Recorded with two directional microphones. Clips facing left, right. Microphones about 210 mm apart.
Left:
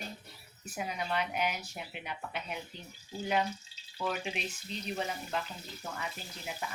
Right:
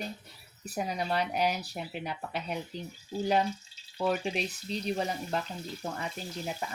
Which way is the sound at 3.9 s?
40° right (ahead or behind).